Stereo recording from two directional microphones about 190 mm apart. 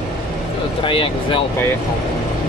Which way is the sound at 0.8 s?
25° left (ahead or behind).